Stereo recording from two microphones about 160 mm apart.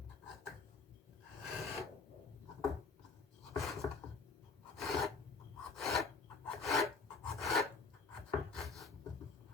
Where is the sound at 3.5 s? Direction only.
Centre (ahead or behind).